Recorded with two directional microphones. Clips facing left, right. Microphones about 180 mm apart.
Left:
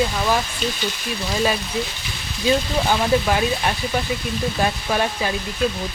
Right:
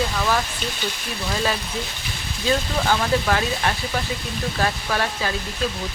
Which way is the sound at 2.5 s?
15° left (ahead or behind).